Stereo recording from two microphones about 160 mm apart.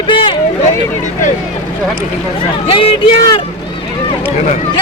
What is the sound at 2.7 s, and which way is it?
Speech, 35° left (ahead or behind).